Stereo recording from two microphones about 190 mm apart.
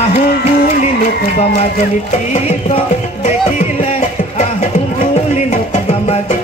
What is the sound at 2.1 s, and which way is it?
Music, 35° left (ahead or behind).